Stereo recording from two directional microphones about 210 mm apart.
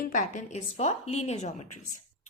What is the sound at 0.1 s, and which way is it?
A woman's voice, 35° left (ahead or behind).